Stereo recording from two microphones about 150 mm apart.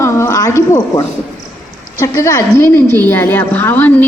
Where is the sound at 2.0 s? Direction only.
20° left (ahead or behind).